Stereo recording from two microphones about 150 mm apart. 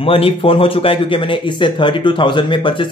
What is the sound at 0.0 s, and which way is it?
A man's voice, 40° left (ahead or behind).